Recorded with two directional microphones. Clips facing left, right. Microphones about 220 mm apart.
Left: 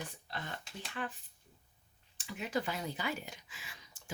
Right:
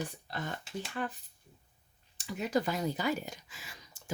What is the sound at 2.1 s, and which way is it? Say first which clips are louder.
Speech: right 5 dB; 40° right (ahead or behind).